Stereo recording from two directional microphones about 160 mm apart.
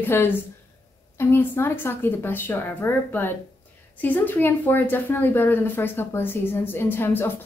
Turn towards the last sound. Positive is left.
turn(degrees=15)  # may be behind; listen again after turning